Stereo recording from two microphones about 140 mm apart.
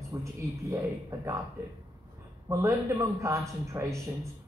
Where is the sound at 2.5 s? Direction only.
20° right (ahead or behind).